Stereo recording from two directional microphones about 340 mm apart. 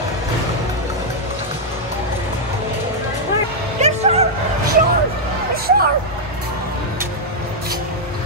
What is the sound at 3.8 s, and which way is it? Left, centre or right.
Music, centre.